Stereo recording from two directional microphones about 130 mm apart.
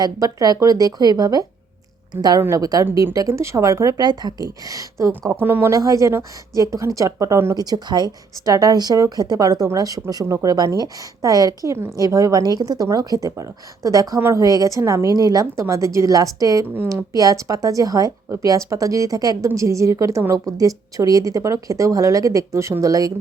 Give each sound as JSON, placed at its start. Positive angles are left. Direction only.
{"t": 0.0, "sound": "a woman's voice", "side_deg": -30}